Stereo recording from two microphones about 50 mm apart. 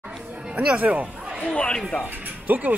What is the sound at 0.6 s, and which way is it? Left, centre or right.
Speech, right.